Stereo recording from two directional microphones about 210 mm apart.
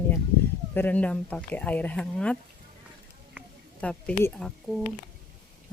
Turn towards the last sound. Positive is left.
turn(degrees=0)  # may be behind; listen again after turning